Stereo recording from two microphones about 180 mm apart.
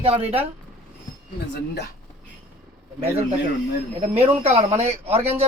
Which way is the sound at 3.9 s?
35° right (ahead or behind).